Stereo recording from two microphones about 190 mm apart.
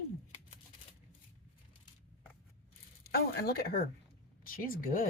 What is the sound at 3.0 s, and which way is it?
Speech, 55° left (ahead or behind).